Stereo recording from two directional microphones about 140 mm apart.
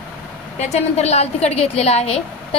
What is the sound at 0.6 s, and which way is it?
A woman's voice, 50° left (ahead or behind).